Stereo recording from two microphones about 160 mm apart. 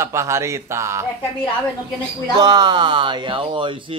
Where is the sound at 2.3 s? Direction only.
25° right (ahead or behind).